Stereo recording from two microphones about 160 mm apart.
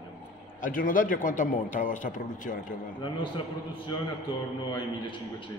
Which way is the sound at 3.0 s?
30° left (ahead or behind).